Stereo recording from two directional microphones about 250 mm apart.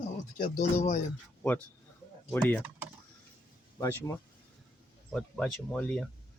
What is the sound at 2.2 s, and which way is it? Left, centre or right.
Speech, centre.